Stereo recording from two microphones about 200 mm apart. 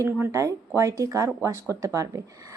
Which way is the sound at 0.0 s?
10° right (ahead or behind).